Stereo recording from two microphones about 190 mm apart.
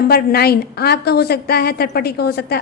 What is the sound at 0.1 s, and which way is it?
A woman's voice, 55° left (ahead or behind).